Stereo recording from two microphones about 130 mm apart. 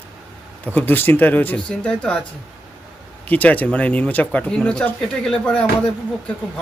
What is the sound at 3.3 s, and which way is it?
Speech, 10° left (ahead or behind).